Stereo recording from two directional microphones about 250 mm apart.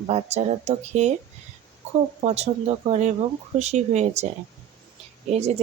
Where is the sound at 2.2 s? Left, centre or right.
Right.